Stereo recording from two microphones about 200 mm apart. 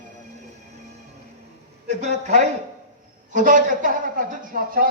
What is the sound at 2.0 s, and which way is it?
A man's voice, 35° right (ahead or behind).